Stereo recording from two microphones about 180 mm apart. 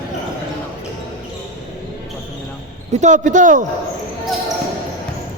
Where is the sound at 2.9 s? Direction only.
40° right (ahead or behind).